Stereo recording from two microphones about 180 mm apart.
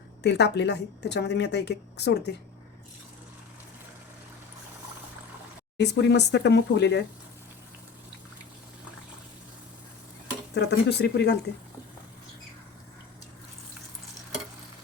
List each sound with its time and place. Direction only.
0.2 s a woman's voice: 70° left (ahead or behind)
5.7 s a woman's voice: 70° left (ahead or behind)
10.5 s a woman's voice: 70° left (ahead or behind)